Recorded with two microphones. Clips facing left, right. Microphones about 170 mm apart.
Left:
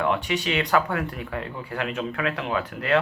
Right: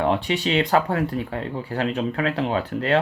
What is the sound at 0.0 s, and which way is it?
Speech, 30° right (ahead or behind).